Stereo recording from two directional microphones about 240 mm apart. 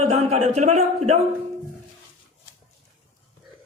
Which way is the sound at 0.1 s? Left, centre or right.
Right.